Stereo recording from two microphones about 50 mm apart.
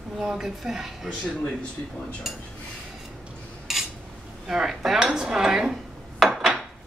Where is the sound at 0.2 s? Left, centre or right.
Centre.